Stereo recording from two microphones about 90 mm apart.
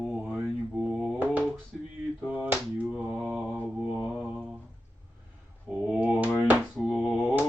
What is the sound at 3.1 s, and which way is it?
Mantra, 10° right (ahead or behind).